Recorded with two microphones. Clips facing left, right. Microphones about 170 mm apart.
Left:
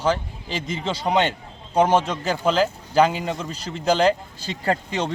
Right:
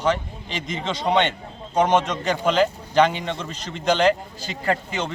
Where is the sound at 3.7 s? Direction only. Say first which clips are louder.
Even; 35° left (ahead or behind).